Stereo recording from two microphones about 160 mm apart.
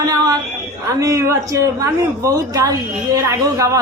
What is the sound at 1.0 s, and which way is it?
A woman's voice, 20° right (ahead or behind).